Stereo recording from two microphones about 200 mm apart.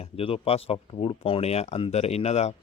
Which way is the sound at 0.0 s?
30° left (ahead or behind).